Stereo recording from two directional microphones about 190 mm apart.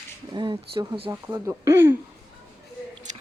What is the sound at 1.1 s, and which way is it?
Speech, 15° right (ahead or behind).